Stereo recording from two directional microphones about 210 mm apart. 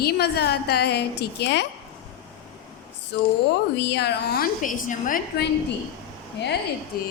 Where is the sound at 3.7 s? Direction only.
55° left (ahead or behind).